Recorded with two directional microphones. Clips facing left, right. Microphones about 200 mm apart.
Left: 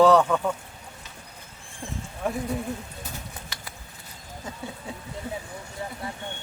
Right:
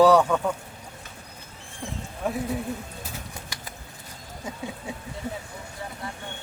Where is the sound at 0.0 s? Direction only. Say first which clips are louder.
Even; 10° right (ahead or behind).